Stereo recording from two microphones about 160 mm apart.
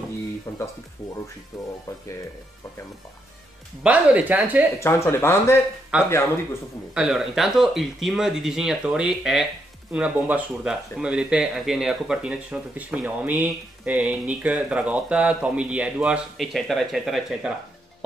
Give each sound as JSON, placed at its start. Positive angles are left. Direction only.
{"t": 0.5, "sound": "speech", "side_deg": 15}
{"t": 1.5, "sound": "speech", "side_deg": 0}
{"t": 3.8, "sound": "speech", "side_deg": -10}
{"t": 4.7, "sound": "speech", "side_deg": 15}
{"t": 6.9, "sound": "speech", "side_deg": -5}